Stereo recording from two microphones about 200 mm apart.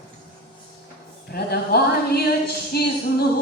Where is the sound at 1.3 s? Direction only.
50° left (ahead or behind).